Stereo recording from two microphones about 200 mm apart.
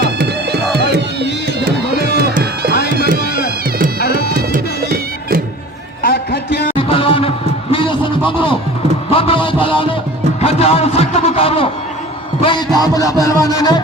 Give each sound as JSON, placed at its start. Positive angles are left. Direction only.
{"t": 0.0, "sound": "music", "side_deg": -50}
{"t": 0.7, "sound": "crowd", "side_deg": -55}
{"t": 4.5, "sound": "music", "side_deg": -45}
{"t": 6.0, "sound": "a sound", "side_deg": 55}
{"t": 6.7, "sound": "music", "side_deg": 25}
{"t": 9.0, "sound": "a sound", "side_deg": 30}
{"t": 10.4, "sound": "a man's voice", "side_deg": 30}
{"t": 12.4, "sound": "music", "side_deg": 25}